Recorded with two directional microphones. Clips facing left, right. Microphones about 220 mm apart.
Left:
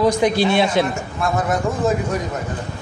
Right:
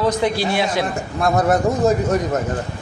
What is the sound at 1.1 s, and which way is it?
Speech, 40° right (ahead or behind).